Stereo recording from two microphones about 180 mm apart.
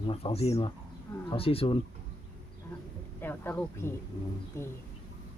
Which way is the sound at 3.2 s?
10° left (ahead or behind).